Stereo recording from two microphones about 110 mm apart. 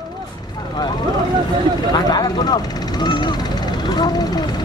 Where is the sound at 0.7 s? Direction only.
40° left (ahead or behind).